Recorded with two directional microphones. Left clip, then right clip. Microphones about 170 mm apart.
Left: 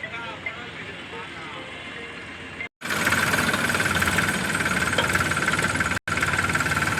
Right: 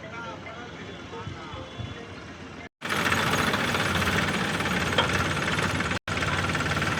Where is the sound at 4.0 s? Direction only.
90° right.